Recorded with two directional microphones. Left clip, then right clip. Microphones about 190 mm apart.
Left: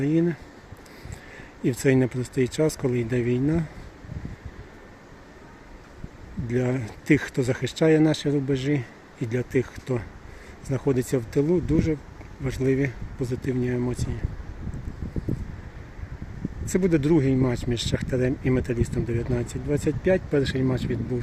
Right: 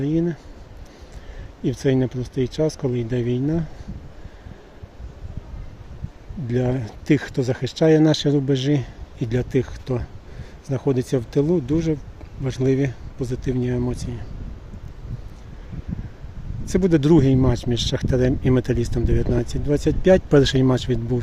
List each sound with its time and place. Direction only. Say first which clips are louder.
0.0 s speech: right 1 dB; 10° right (ahead or behind)
1.6 s speech: right 1 dB; 10° right (ahead or behind)
6.5 s speech: right 3 dB; 15° right (ahead or behind)
16.7 s speech: right 5 dB; 20° right (ahead or behind)